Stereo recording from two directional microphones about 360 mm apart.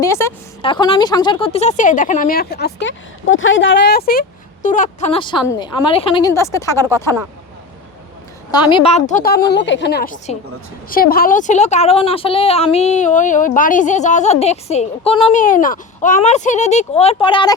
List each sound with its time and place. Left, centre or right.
0.0 s a woman's voice: centre
8.5 s a woman's voice: centre